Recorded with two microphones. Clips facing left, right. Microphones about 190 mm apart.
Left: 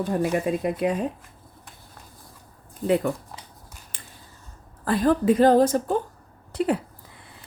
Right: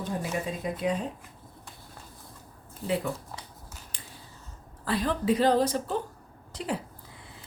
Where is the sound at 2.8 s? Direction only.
55° left (ahead or behind).